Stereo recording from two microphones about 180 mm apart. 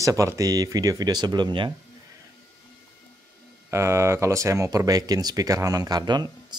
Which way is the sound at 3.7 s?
15° right (ahead or behind).